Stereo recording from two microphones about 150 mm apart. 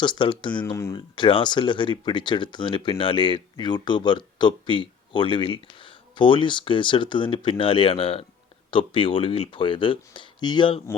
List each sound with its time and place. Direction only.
0.0 s speech: 30° left (ahead or behind)
0.6 s speech: 20° left (ahead or behind)